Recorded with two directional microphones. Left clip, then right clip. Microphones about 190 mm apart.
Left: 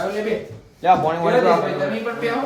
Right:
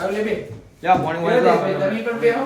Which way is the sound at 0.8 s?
45° left (ahead or behind).